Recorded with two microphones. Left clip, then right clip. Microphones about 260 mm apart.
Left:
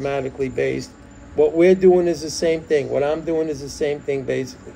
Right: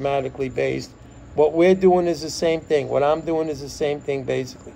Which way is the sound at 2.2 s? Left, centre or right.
Right.